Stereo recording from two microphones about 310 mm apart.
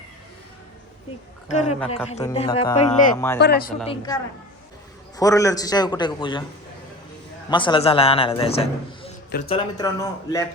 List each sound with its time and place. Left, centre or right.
1.5 s speech: left
3.8 s a man's voice: centre
7.5 s a man's voice: centre